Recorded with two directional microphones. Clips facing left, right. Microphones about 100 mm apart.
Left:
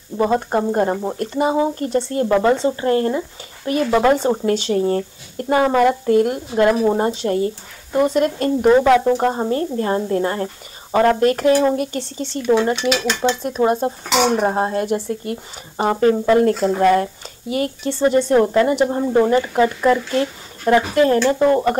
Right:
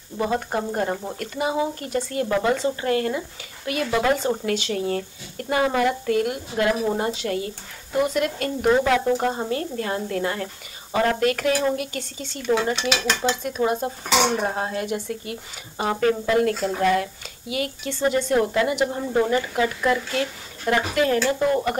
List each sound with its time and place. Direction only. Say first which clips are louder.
0.2 s speech: left 6 dB; 35° left (ahead or behind)
13.2 s dishes: left 6 dB; 45° left (ahead or behind)
13.6 s speech: left 6 dB; 35° left (ahead or behind)